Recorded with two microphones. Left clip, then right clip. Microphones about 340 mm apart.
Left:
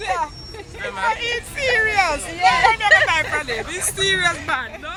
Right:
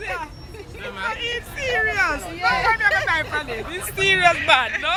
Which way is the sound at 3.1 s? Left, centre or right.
Centre.